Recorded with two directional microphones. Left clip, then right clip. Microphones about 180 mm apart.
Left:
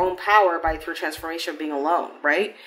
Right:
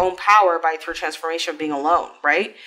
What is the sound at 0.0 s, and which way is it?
Speech, 40° right (ahead or behind).